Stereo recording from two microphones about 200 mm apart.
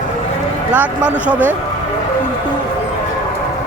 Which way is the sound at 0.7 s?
5° right (ahead or behind).